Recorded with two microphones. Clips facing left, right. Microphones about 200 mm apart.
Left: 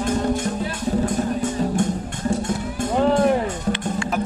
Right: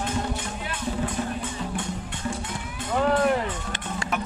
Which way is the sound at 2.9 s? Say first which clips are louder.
Left 4 dB; 30° left (ahead or behind).